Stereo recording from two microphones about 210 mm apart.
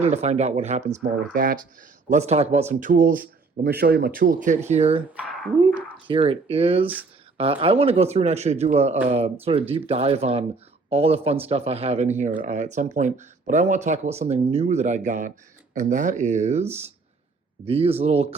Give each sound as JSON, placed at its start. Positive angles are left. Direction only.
{"t": 0.0, "sound": "a man's voice", "side_deg": -30}
{"t": 6.1, "sound": "a man's voice", "side_deg": -25}
{"t": 16.6, "sound": "speech", "side_deg": -10}
{"t": 17.7, "sound": "speech", "side_deg": -30}